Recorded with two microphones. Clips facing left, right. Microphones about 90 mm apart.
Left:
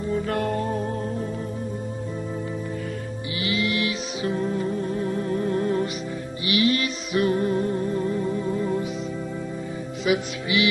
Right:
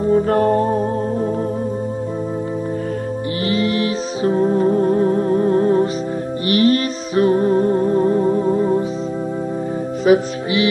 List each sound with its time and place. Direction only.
0.0 s music: 40° right (ahead or behind)
3.4 s music: 40° right (ahead or behind)
10.0 s music: 35° right (ahead or behind)